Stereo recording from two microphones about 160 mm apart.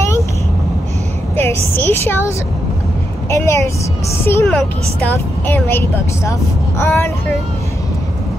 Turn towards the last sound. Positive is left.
turn(degrees=15)  # may be behind; listen again after turning